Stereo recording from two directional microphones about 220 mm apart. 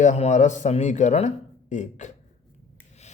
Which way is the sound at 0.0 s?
35° left (ahead or behind).